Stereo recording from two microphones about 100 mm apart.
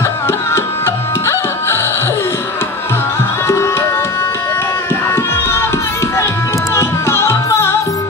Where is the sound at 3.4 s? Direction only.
25° left (ahead or behind).